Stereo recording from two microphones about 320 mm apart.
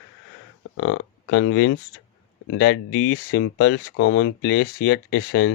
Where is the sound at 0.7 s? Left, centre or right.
Left.